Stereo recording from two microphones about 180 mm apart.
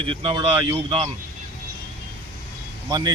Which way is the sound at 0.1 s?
25° right (ahead or behind).